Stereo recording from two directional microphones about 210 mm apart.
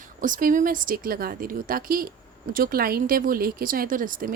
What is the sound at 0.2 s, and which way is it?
Speech, 40° right (ahead or behind).